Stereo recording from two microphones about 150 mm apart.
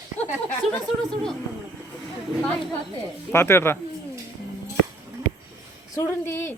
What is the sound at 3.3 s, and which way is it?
Speech, 15° left (ahead or behind).